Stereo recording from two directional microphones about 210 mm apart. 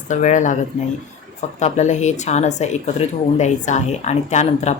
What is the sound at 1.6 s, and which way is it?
Speech, 35° left (ahead or behind).